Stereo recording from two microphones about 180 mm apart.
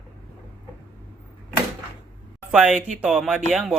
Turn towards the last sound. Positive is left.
turn(degrees=0)  # may be behind; listen again after turning